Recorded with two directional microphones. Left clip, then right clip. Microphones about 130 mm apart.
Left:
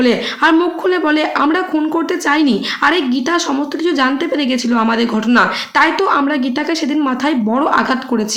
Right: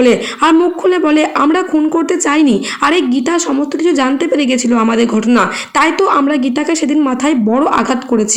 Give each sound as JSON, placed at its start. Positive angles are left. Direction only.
{"t": 0.0, "sound": "a woman's voice", "side_deg": -20}